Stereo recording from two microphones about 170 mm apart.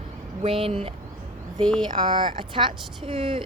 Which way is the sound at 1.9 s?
25° right (ahead or behind).